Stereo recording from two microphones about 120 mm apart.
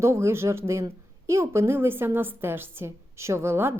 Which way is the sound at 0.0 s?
25° right (ahead or behind).